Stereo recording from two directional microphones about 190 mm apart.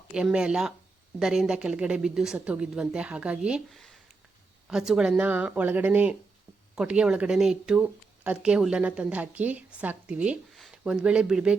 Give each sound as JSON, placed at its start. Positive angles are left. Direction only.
{"t": 0.1, "sound": "speech", "side_deg": -5}